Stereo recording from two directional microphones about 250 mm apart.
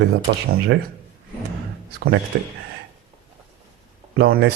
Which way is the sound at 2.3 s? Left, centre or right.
Right.